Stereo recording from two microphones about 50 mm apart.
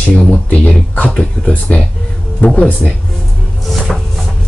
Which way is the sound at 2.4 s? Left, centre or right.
Left.